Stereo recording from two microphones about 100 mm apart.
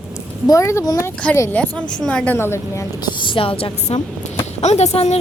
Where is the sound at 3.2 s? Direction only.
65° left (ahead or behind).